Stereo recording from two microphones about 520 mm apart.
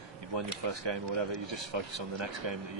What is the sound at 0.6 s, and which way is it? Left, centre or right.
Speech, right.